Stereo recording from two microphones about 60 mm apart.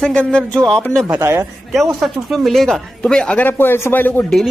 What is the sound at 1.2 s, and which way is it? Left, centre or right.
Speech, right.